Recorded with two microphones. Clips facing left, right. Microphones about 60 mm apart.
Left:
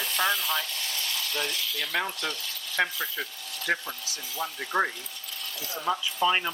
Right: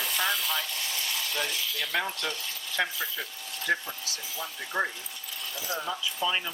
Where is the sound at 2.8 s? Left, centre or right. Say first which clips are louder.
Left 3 dB; centre.